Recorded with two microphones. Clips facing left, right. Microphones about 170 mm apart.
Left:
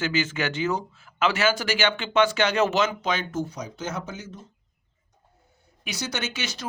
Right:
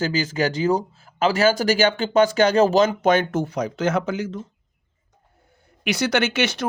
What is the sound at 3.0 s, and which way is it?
Speech, 55° right (ahead or behind).